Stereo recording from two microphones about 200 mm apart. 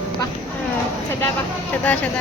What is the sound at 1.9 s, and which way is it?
Speech, 5° left (ahead or behind).